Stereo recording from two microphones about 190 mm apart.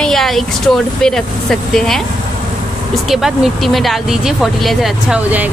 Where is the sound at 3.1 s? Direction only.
Centre (ahead or behind).